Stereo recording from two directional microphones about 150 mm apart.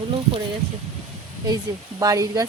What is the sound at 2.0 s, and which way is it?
Speech, 20° right (ahead or behind).